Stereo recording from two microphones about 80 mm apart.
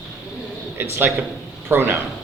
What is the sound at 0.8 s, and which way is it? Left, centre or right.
Speech, right.